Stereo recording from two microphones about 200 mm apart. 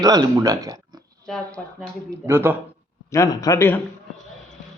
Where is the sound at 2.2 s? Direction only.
10° right (ahead or behind).